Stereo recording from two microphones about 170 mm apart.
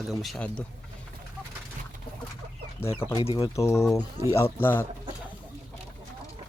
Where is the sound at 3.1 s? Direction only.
35° left (ahead or behind).